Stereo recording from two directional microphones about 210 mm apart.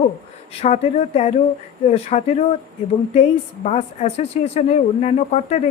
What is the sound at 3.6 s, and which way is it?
A woman's voice, 30° left (ahead or behind).